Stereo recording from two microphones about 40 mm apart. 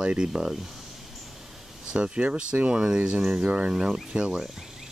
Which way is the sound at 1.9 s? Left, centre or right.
Right.